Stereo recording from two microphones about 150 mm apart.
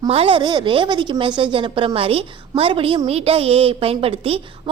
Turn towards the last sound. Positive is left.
turn(degrees=-40)  # may be behind; listen again after turning